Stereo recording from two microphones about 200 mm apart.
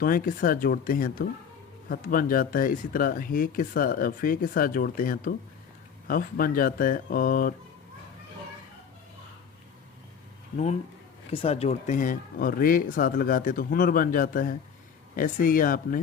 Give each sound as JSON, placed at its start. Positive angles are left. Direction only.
{"t": 0.0, "sound": "speech", "side_deg": 45}
{"t": 11.3, "sound": "speech", "side_deg": 30}